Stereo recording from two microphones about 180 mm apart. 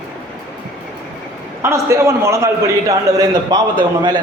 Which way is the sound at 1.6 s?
15° right (ahead or behind).